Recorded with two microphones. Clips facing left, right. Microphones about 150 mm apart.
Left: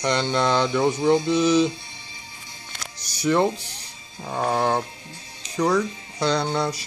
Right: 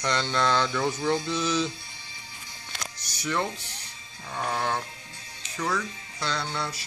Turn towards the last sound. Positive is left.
turn(degrees=40)  # may be behind; listen again after turning